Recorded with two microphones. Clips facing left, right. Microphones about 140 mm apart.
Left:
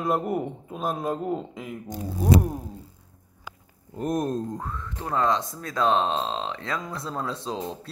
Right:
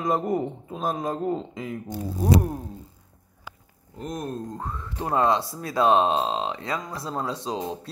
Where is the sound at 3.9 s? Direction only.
45° left (ahead or behind).